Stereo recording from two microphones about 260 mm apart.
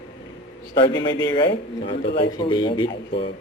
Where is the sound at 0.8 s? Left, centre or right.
Centre.